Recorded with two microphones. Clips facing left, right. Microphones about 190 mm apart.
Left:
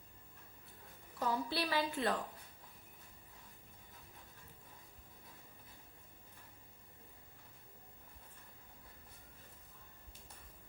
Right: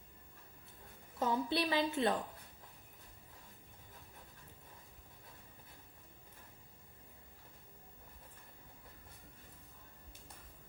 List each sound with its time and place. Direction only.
1.2 s a woman's voice: 20° right (ahead or behind)